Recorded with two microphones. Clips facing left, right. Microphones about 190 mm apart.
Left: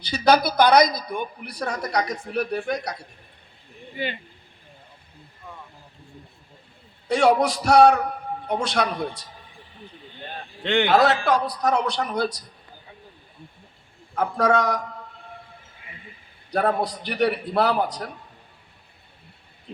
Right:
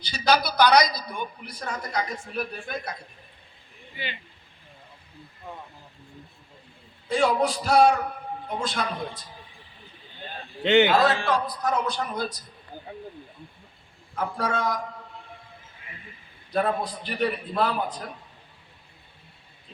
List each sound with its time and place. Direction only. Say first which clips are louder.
0.0 s a woman's voice: left 5 dB; 60° left (ahead or behind); by 2.9 s 75° left (ahead or behind)
3.9 s speech: left 7 dB; 45° left (ahead or behind)
7.1 s a man's voice: left 4 dB; 75° left (ahead or behind)
10.6 s a man's voice: right 4 dB; 5° right (ahead or behind)
10.9 s a man's voice: left 3 dB; 70° left (ahead or behind)
14.2 s a man's voice: left 7 dB; 65° left (ahead or behind)
16.8 s a man's voice: left 4 dB; 75° left (ahead or behind)